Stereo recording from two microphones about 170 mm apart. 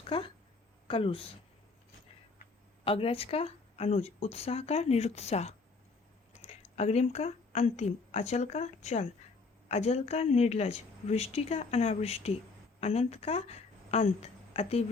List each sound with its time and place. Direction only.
0.9 s speech: 30° left (ahead or behind)
2.8 s a woman's voice: 35° left (ahead or behind)